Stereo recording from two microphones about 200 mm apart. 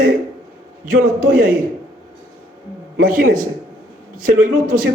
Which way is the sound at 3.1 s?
45° right (ahead or behind).